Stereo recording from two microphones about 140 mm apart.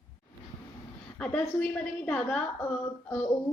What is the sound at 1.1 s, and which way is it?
A woman's voice, 10° left (ahead or behind).